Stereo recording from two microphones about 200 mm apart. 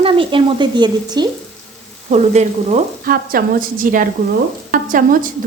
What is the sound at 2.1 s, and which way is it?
A woman's voice, 35° right (ahead or behind).